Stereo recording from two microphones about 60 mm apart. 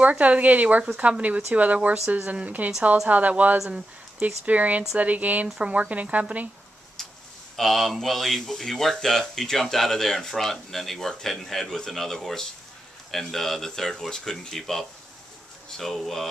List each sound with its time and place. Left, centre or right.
0.0 s speech: right
3.5 s speech: centre
4.5 s speech: right
7.0 s a sound: centre
7.5 s speech: centre